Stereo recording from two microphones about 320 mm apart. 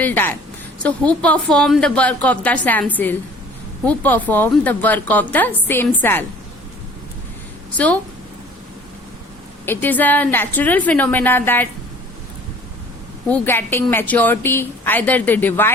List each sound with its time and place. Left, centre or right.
0.0 s a woman's voice: centre
7.8 s a woman's voice: centre
9.6 s a woman's voice: centre
13.2 s a woman's voice: centre